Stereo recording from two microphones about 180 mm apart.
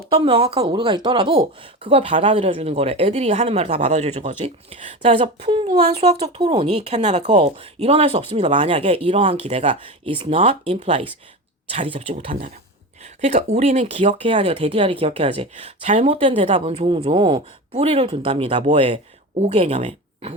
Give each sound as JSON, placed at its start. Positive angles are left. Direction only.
{"t": 0.1, "sound": "speech", "side_deg": -30}